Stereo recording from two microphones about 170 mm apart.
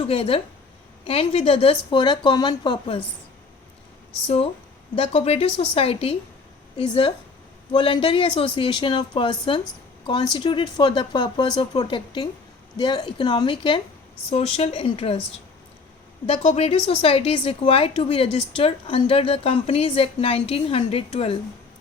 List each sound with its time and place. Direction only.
0.0 s a woman's voice: 35° left (ahead or behind)
4.9 s a woman's voice: 35° left (ahead or behind)
16.2 s a woman's voice: 40° left (ahead or behind)